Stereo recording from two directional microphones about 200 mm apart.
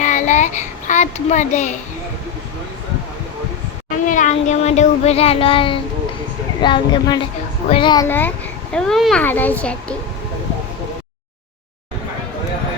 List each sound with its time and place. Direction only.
0.0 s a child's voice: 40° left (ahead or behind)
4.0 s a woman's voice: 40° left (ahead or behind); by 8.0 s 25° left (ahead or behind)
8.0 s a child's voice: 10° left (ahead or behind)